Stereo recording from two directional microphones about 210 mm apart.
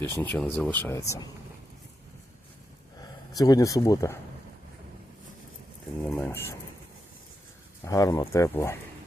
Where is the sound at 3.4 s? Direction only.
15° left (ahead or behind).